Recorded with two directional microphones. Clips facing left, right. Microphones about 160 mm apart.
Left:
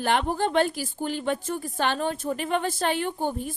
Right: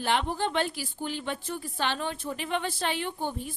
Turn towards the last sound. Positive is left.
turn(degrees=45)  # may be behind; listen again after turning